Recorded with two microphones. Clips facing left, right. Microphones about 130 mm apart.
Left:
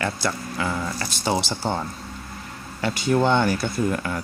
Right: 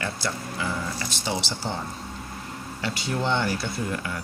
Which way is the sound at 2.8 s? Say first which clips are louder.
Left 7 dB; 50° left (ahead or behind).